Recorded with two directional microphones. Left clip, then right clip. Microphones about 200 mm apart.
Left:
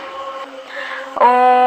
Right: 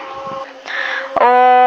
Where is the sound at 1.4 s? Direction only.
15° right (ahead or behind).